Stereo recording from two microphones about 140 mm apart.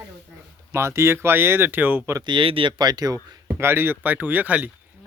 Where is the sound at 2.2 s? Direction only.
35° right (ahead or behind).